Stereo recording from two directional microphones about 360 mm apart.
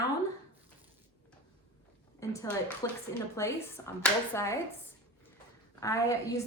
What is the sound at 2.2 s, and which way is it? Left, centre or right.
A woman's voice, centre.